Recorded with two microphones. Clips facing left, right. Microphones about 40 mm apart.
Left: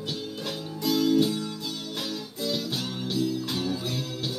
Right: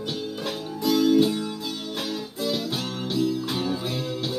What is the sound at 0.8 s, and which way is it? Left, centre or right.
Music, centre.